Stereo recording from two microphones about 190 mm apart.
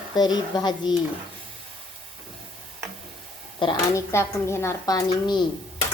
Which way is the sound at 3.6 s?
25° left (ahead or behind).